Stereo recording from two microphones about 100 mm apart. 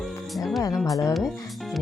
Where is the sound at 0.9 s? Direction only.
35° left (ahead or behind).